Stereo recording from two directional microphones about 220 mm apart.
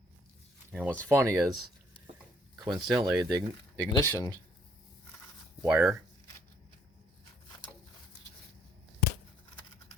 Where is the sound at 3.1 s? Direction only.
Centre (ahead or behind).